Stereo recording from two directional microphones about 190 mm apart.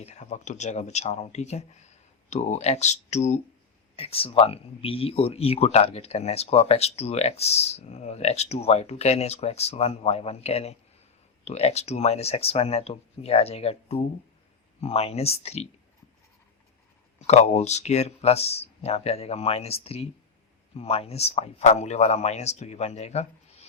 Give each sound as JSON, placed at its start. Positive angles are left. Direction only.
{"t": 0.0, "sound": "speech", "side_deg": 35}
{"t": 17.2, "sound": "speech", "side_deg": 35}